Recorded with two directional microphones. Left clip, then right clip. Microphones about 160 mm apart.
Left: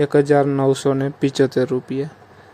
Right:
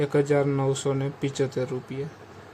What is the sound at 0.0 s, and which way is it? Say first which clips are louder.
Speech: left 8 dB; 35° left (ahead or behind).